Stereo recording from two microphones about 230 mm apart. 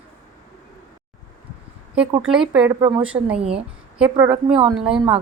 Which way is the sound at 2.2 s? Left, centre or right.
Centre.